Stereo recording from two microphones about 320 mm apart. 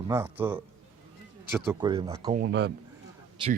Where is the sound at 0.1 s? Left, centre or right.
Centre.